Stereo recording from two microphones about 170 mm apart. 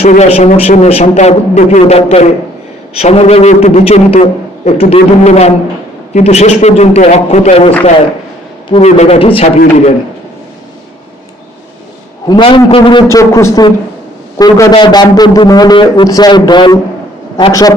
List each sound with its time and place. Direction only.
0.0 s a man's voice: 40° left (ahead or behind)
8.7 s a man's voice: 40° left (ahead or behind)
12.3 s a man's voice: 30° left (ahead or behind)
13.1 s a man's voice: 20° left (ahead or behind)